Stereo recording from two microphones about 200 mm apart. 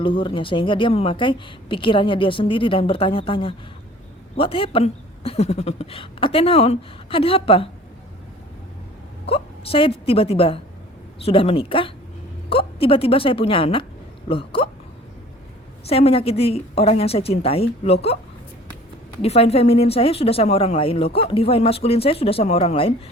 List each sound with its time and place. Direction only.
0.0 s speech: 25° left (ahead or behind)
9.2 s a woman's voice: 30° left (ahead or behind)
15.9 s speech: 30° left (ahead or behind)
19.2 s speech: 30° left (ahead or behind)